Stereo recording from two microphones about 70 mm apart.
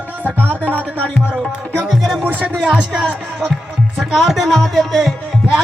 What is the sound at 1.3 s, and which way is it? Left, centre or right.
Music, centre.